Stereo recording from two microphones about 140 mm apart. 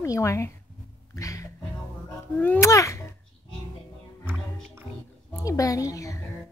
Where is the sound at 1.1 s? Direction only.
25° left (ahead or behind).